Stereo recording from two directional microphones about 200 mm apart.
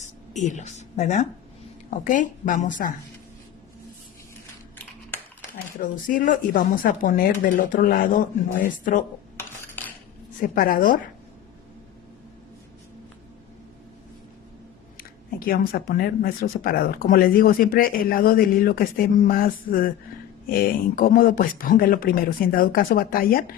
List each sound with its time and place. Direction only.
0.0 s a woman's voice: 35° left (ahead or behind)
5.7 s a woman's voice: 45° left (ahead or behind)
9.4 s cutlery: 10° left (ahead or behind)
10.5 s speech: 45° left (ahead or behind)
14.9 s speech: 45° left (ahead or behind)